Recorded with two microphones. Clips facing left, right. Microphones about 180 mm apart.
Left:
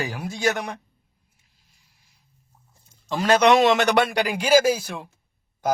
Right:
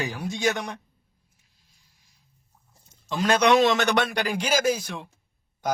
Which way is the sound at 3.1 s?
50° left (ahead or behind).